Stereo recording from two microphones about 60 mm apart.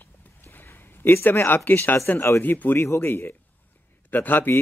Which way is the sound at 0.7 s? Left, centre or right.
Left.